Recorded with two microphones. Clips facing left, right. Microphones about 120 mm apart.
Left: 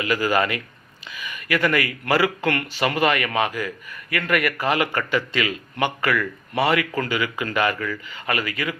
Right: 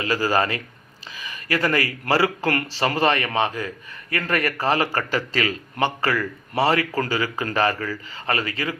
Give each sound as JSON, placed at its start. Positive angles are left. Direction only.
{"t": 0.0, "sound": "speech", "side_deg": -30}
{"t": 1.1, "sound": "a sound", "side_deg": -30}
{"t": 2.0, "sound": "speech", "side_deg": -30}